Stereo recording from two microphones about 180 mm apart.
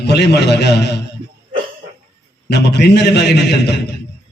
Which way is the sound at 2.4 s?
70° left (ahead or behind).